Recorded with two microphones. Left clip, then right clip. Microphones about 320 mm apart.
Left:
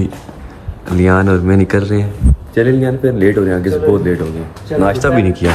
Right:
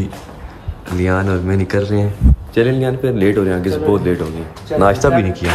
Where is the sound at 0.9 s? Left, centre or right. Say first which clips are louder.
Left 5 dB; centre.